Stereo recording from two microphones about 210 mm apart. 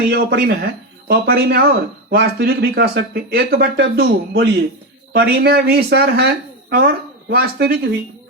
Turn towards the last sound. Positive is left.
turn(degrees=-50)  # may be behind; listen again after turning